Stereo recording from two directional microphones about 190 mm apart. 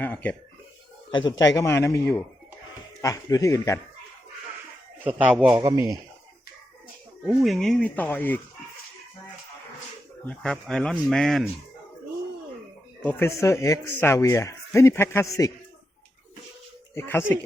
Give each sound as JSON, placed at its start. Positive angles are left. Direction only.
{"t": 0.0, "sound": "speech", "side_deg": 10}
{"t": 1.4, "sound": "speech", "side_deg": 15}
{"t": 5.0, "sound": "a man's voice", "side_deg": -5}
{"t": 7.3, "sound": "speech", "side_deg": 0}
{"t": 10.2, "sound": "a man's voice", "side_deg": 5}
{"t": 13.0, "sound": "speech", "side_deg": 10}
{"t": 16.9, "sound": "speech", "side_deg": 15}